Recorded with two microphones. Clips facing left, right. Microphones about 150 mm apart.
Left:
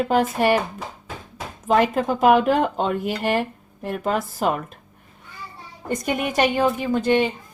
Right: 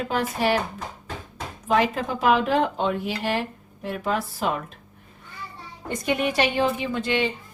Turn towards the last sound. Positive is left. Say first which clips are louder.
# left 5 dB
turn(degrees=45)  # may be behind; listen again after turning